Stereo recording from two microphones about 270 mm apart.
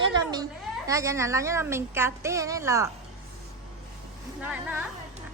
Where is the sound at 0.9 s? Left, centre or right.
Centre.